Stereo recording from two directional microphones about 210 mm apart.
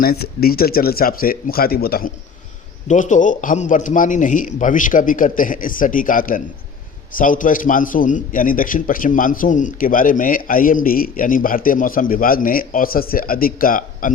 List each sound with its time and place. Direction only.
0.0 s a man's voice: 45° left (ahead or behind)